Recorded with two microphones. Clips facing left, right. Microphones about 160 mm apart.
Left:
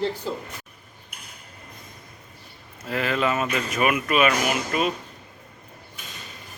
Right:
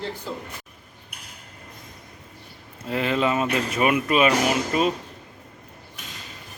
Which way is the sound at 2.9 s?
25° right (ahead or behind).